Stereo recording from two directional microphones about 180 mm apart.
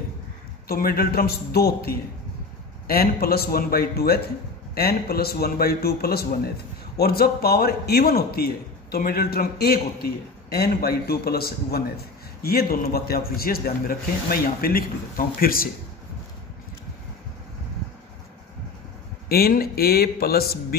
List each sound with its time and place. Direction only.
0.7 s a man's voice: 55° left (ahead or behind)
19.2 s a man's voice: 60° left (ahead or behind)